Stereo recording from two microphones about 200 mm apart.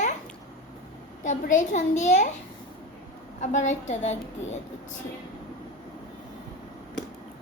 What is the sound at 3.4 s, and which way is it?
Child singing, 35° left (ahead or behind).